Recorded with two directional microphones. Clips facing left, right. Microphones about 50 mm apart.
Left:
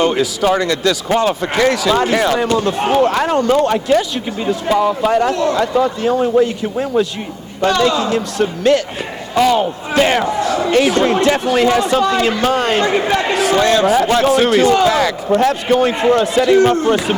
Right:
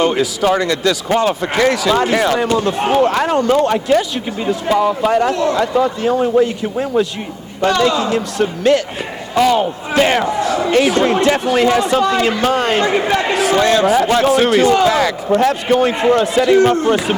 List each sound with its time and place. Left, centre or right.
0.0 s a man's voice: right
7.6 s speech: right
9.6 s speech: right